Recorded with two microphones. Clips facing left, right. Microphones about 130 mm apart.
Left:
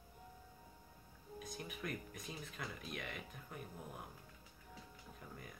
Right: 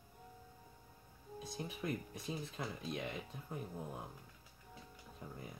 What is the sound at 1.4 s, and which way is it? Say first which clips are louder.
Speech: right 3 dB; 30° right (ahead or behind).